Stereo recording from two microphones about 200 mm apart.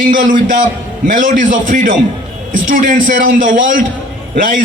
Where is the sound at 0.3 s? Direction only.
40° right (ahead or behind).